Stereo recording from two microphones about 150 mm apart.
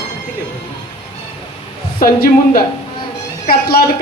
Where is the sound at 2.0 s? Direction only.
75° left (ahead or behind).